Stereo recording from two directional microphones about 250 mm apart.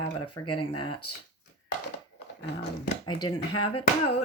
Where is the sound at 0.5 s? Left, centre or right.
Left.